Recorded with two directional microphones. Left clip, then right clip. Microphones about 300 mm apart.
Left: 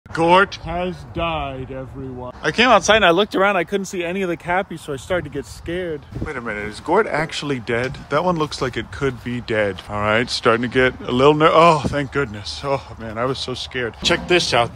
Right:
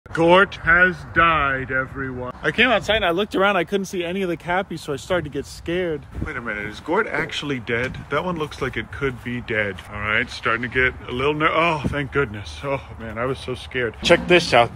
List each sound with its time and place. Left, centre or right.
0.1 s speech: centre
2.4 s speech: centre
2.9 s speech: left
3.2 s speech: centre